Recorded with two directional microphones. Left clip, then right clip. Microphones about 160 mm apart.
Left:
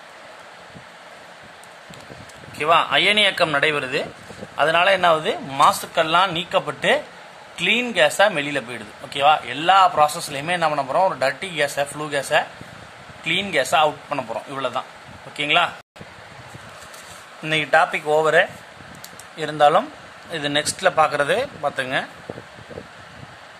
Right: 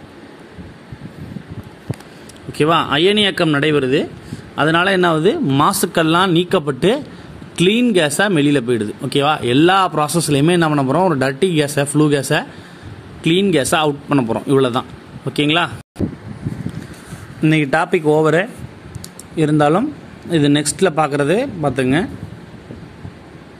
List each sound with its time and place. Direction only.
2.5 s a man's voice: 30° right (ahead or behind)
17.4 s speech: 25° right (ahead or behind)